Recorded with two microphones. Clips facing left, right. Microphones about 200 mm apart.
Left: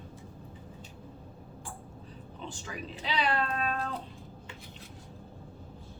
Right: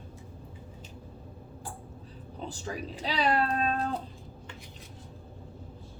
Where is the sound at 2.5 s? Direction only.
35° right (ahead or behind).